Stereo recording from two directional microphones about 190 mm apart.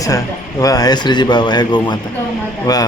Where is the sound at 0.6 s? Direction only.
20° left (ahead or behind).